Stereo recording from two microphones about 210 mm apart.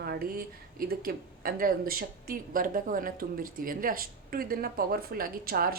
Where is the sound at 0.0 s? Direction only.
45° right (ahead or behind).